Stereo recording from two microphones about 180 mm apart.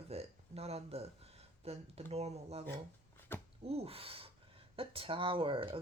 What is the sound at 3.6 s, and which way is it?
Speech, 35° right (ahead or behind).